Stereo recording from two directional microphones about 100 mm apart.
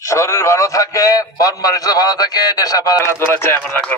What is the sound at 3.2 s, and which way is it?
Speech, 20° left (ahead or behind).